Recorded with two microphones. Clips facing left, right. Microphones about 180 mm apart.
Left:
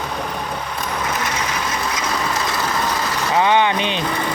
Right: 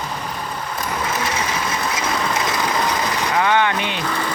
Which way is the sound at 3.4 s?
20° left (ahead or behind).